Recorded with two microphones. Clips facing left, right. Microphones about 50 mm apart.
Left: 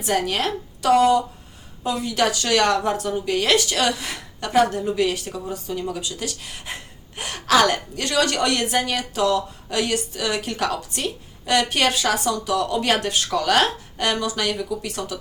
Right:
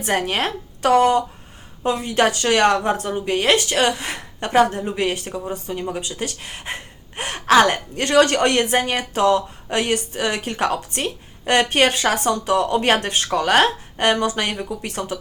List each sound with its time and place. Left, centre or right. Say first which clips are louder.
0.0 s a woman's voice: right 1 dB; right